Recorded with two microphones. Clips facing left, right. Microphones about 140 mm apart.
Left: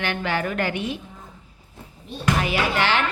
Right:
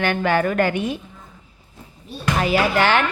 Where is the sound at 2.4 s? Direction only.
40° right (ahead or behind).